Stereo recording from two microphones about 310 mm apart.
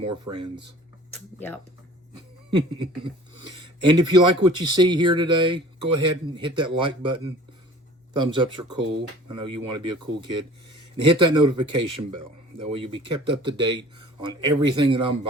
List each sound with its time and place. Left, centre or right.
0.0 s speech: centre
0.3 s speech: right
2.5 s speech: centre